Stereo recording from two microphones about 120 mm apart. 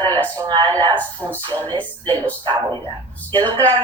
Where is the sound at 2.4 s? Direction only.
40° right (ahead or behind).